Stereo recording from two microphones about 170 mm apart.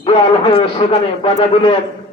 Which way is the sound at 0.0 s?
35° left (ahead or behind).